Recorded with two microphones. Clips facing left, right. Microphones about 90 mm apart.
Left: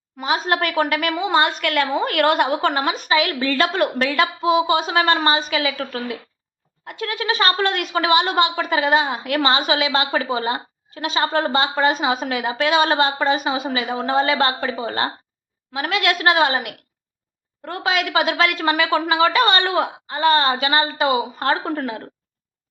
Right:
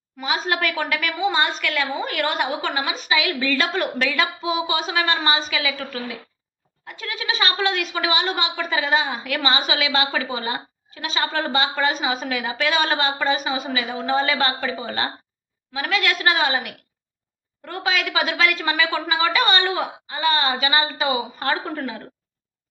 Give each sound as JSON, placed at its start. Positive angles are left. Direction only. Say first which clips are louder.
{"t": 0.2, "sound": "a woman's voice", "louder": "left 3 dB", "side_deg": 45}